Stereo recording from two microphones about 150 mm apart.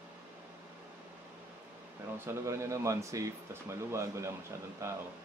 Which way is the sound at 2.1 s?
20° right (ahead or behind).